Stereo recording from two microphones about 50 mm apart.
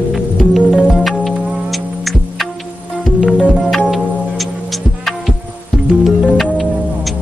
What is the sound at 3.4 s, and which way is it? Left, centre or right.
Music, right.